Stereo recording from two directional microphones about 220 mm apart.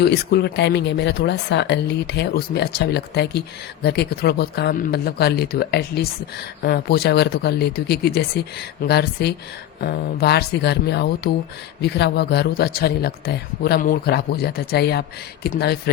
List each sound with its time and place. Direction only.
0.0 s speech: 45° left (ahead or behind)